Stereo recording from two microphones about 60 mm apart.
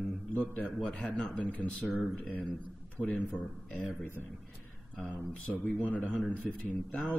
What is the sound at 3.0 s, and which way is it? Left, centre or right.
Mantra, left.